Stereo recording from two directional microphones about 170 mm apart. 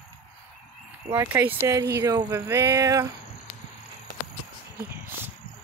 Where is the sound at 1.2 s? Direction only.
15° right (ahead or behind).